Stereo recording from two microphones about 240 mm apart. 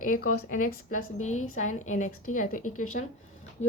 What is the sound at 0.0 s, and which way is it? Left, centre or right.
Speech, left.